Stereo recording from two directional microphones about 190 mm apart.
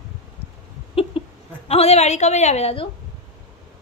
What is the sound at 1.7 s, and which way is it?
A woman's voice, 35° left (ahead or behind).